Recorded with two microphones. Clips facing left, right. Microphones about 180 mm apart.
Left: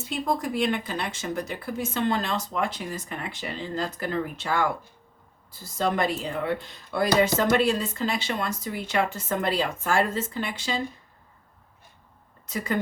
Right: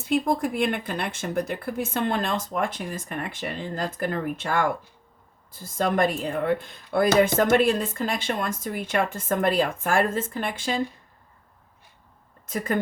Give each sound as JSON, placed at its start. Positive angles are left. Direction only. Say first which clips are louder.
{"t": 0.0, "sound": "speech", "louder": "right 4 dB", "side_deg": -55}